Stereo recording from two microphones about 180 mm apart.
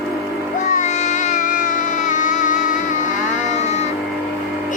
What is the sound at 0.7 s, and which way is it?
Music, 40° left (ahead or behind).